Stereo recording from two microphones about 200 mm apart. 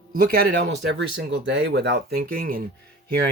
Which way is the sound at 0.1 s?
50° right (ahead or behind).